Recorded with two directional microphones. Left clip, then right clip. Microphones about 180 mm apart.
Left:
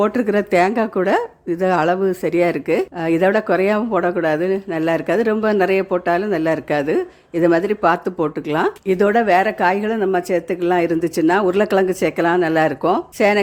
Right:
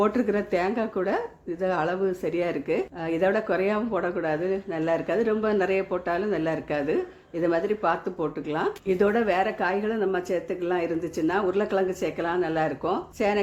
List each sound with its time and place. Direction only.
0.0 s speech: 30° left (ahead or behind)